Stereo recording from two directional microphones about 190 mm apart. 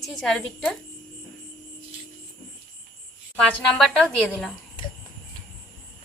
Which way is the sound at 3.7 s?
5° left (ahead or behind).